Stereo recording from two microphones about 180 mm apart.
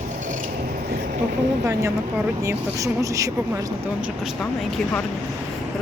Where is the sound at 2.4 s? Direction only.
15° right (ahead or behind).